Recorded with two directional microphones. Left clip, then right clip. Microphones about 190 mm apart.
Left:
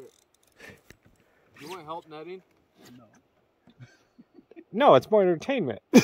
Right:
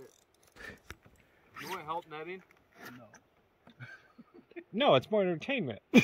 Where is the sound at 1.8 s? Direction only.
90° left.